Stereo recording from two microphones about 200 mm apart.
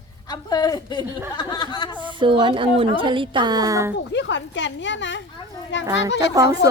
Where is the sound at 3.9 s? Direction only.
60° left (ahead or behind).